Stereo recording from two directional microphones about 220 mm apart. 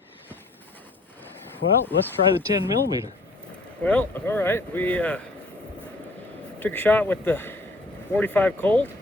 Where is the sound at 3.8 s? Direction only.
5° left (ahead or behind).